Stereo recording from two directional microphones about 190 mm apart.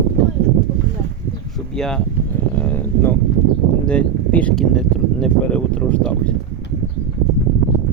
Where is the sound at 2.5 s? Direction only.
10° left (ahead or behind).